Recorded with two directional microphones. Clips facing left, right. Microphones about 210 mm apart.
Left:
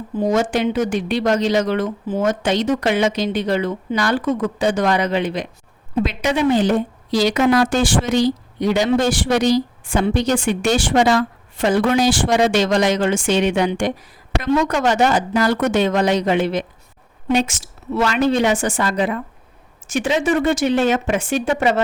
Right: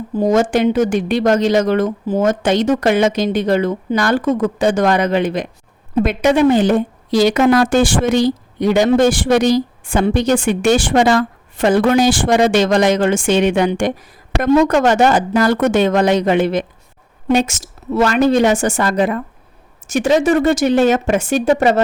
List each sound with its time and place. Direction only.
0.2 s a woman's voice: 45° right (ahead or behind)